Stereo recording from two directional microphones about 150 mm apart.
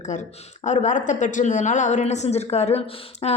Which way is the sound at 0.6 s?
50° left (ahead or behind).